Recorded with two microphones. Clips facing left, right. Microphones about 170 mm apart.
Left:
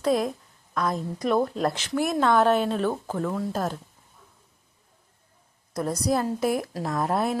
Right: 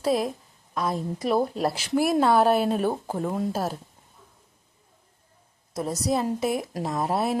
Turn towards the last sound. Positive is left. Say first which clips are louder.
# even
turn(degrees=0)  # may be behind; listen again after turning